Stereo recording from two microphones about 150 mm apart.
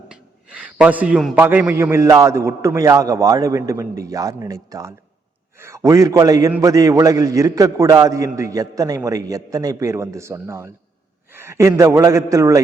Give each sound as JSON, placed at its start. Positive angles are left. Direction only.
{"t": 0.1, "sound": "a man's voice", "side_deg": -10}